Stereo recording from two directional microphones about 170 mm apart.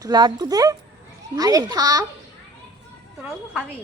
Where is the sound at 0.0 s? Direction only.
25° right (ahead or behind).